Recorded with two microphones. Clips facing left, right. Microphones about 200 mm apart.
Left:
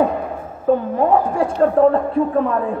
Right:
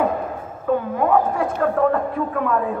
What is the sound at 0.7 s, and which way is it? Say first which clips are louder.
A woman's voice: left 3 dB; 30° left (ahead or behind).